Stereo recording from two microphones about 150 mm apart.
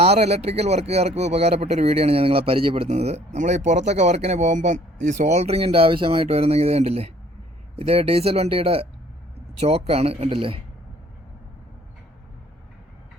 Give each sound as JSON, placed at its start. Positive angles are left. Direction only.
{"t": 0.0, "sound": "speech", "side_deg": -45}
{"t": 2.9, "sound": "speech", "side_deg": -50}